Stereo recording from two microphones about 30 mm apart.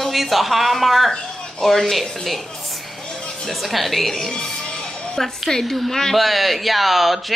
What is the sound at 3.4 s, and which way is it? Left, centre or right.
Speech, centre.